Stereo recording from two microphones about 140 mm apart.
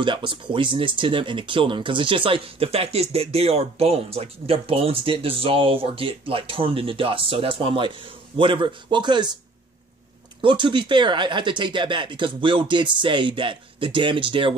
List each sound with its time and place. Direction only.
0.0 s speech: 35° right (ahead or behind)
10.4 s speech: 35° right (ahead or behind)